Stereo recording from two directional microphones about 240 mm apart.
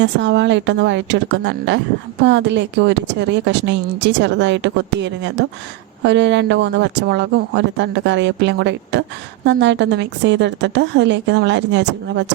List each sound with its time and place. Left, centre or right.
0.0 s speech: right